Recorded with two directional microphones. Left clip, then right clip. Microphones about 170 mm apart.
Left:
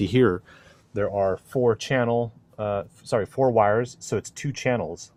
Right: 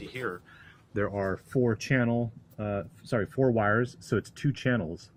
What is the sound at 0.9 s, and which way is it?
Speech, 30° left (ahead or behind).